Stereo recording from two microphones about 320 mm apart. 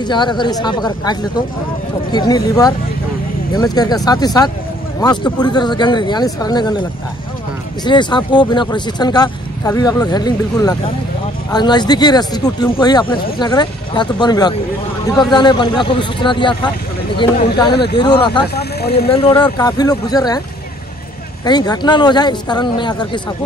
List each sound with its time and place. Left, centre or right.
0.0 s speech: centre
2.1 s speech: centre
18.5 s speech: left
19.0 s speech: centre
21.5 s speech: centre